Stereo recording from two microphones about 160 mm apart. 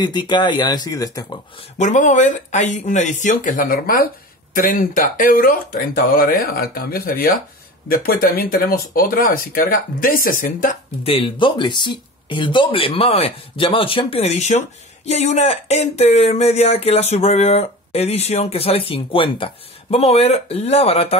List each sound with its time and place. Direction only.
0.0 s speech: 30° left (ahead or behind)
1.8 s speech: 50° left (ahead or behind)
11.1 s speech: 35° left (ahead or behind)